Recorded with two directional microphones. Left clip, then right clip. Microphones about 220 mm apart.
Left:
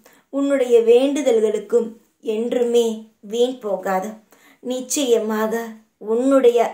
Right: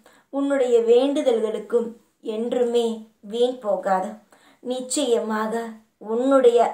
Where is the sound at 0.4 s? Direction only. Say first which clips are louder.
Left 3 dB; 45° left (ahead or behind).